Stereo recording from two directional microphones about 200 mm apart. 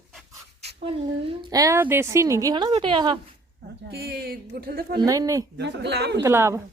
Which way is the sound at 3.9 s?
50° right (ahead or behind).